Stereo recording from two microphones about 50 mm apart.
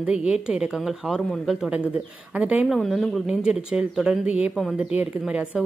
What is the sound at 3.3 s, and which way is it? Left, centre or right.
A woman's voice, centre.